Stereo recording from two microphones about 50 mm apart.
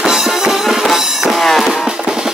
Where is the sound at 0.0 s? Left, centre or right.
Centre.